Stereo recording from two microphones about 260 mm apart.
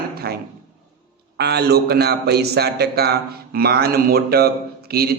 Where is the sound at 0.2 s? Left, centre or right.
Right.